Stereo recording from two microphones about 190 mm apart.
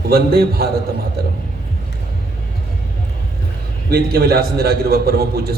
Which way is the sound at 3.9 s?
55° right (ahead or behind).